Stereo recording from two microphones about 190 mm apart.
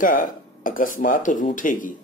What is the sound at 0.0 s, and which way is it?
Speech, 45° left (ahead or behind).